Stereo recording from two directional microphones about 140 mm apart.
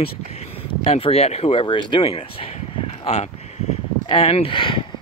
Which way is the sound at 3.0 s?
45° left (ahead or behind).